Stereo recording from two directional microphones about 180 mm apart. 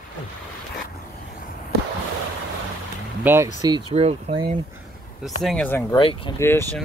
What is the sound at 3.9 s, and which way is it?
Speech, 35° right (ahead or behind).